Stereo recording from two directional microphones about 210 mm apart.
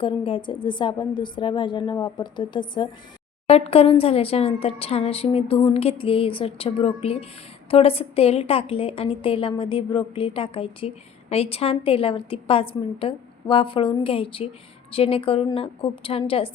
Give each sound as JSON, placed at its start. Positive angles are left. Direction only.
{"t": 0.0, "sound": "a woman's voice", "side_deg": 25}